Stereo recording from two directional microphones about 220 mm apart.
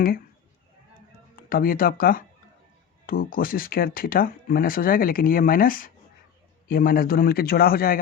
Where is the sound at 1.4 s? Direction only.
40° left (ahead or behind).